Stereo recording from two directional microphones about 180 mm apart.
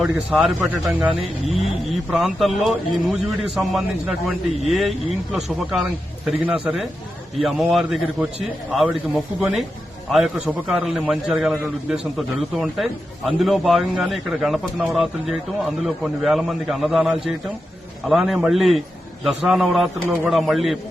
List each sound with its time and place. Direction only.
0.0 s a man's voice: 5° right (ahead or behind)